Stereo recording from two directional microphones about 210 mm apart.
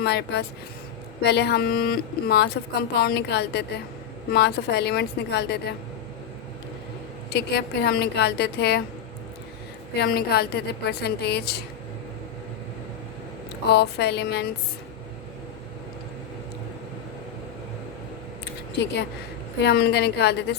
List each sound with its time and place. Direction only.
0.0 s speech: 50° left (ahead or behind)
7.3 s speech: 50° left (ahead or behind)
10.0 s speech: 50° left (ahead or behind)
13.7 s speech: 50° left (ahead or behind)
19.6 s speech: 50° left (ahead or behind)